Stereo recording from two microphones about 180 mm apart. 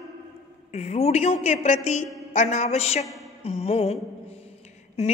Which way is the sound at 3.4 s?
35° left (ahead or behind).